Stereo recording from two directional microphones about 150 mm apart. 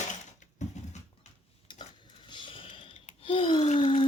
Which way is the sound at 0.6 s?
50° left (ahead or behind).